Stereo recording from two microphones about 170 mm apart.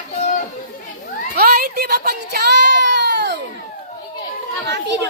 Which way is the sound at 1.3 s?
60° right (ahead or behind).